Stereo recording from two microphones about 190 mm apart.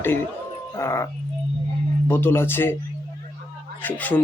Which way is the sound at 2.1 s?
10° left (ahead or behind).